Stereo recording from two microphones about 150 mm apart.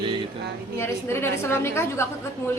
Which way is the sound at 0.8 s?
15° left (ahead or behind).